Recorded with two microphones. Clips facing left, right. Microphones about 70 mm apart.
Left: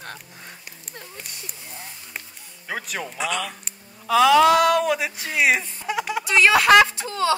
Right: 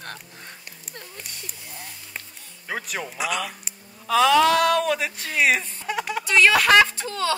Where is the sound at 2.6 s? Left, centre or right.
Centre.